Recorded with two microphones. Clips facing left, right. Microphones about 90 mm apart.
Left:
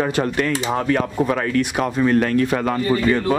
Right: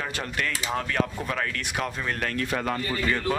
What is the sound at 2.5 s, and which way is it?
Speech, 90° left.